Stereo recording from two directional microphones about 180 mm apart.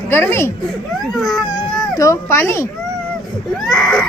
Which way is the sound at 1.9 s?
15° left (ahead or behind).